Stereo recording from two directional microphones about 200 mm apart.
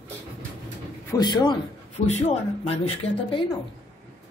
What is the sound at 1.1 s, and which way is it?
Speech, 20° left (ahead or behind).